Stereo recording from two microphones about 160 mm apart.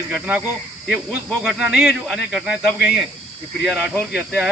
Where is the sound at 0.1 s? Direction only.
10° right (ahead or behind).